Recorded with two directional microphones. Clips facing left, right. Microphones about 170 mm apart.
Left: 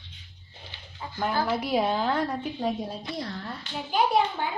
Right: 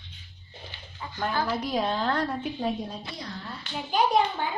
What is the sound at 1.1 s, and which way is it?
A child's voice, 10° left (ahead or behind).